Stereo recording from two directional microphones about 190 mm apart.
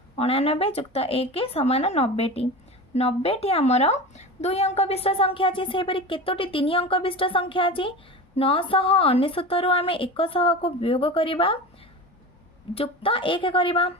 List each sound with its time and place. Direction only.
0.2 s a woman's voice: 30° left (ahead or behind)
12.7 s a woman's voice: 30° left (ahead or behind)